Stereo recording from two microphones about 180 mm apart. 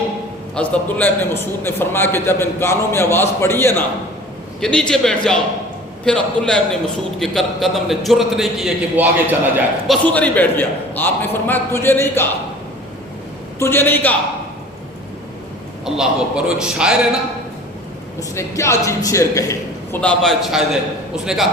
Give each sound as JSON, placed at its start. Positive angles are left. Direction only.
{"t": 0.5, "sound": "a man's voice", "side_deg": 5}
{"t": 13.6, "sound": "a man's voice", "side_deg": 10}
{"t": 16.0, "sound": "a man's voice", "side_deg": -5}
{"t": 18.2, "sound": "a man's voice", "side_deg": 15}
{"t": 20.0, "sound": "a man's voice", "side_deg": 5}